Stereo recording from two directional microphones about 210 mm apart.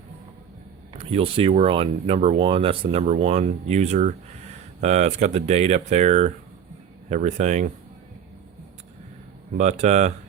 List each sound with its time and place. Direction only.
0.9 s speech: 25° right (ahead or behind)
9.6 s speech: 35° right (ahead or behind)